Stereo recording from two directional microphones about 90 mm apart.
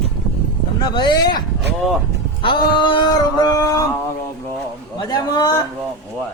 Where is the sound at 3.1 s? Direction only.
45° left (ahead or behind).